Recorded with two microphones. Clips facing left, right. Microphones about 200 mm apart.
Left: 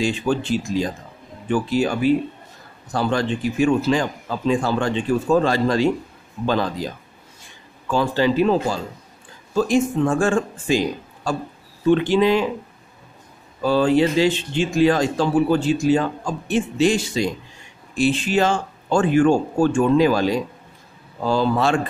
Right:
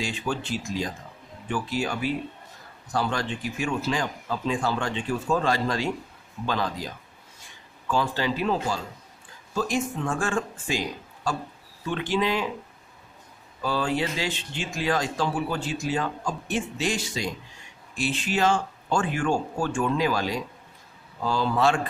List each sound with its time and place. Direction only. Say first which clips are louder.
0.0 s speech: left 8 dB; 30° left (ahead or behind)
7.9 s speech: left 7 dB; 30° left (ahead or behind)
13.7 s speech: left 10 dB; 30° left (ahead or behind)